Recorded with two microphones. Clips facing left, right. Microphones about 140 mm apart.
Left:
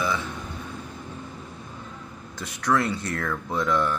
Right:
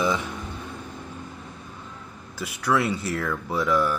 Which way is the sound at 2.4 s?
10° right (ahead or behind).